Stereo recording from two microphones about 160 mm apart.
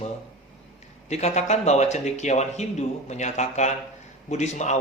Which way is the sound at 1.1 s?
45° left (ahead or behind).